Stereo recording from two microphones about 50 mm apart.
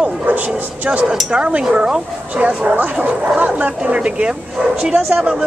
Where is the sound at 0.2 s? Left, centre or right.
Right.